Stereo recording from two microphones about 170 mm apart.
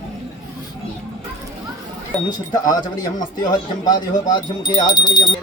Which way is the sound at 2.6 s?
25° left (ahead or behind).